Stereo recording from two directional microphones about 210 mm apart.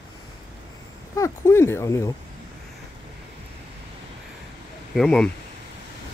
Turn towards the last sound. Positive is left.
turn(degrees=5)  # may be behind; listen again after turning